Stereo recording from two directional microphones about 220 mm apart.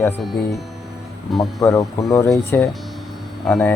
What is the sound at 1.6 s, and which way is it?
Speech, 15° left (ahead or behind).